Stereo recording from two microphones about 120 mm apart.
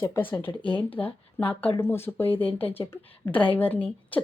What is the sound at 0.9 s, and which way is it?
Speech, 15° left (ahead or behind).